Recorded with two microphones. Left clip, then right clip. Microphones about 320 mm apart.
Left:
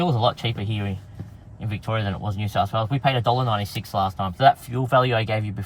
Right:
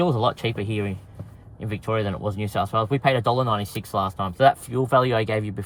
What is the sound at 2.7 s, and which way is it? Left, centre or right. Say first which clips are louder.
Speech: right 2 dB; left.